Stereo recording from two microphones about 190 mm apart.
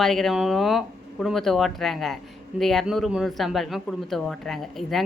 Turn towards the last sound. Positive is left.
turn(degrees=0)  # may be behind; listen again after turning